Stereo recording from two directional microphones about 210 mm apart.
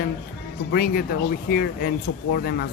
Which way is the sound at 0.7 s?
45° left (ahead or behind).